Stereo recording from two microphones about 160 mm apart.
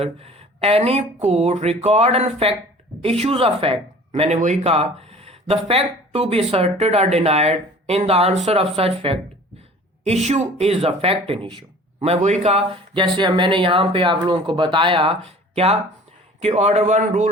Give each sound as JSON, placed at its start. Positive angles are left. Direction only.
{"t": 0.0, "sound": "speech", "side_deg": -40}
{"t": 10.2, "sound": "speech", "side_deg": -40}